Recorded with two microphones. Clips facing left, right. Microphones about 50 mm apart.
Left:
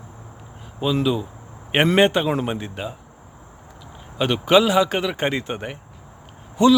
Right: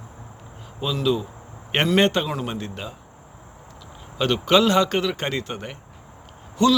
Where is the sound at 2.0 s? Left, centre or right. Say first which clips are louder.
Left 3 dB; centre.